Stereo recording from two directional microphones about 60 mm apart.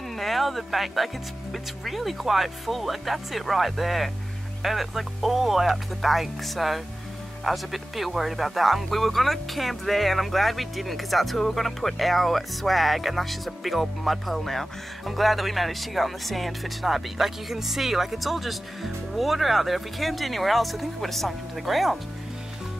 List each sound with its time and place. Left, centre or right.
0.2 s speech: centre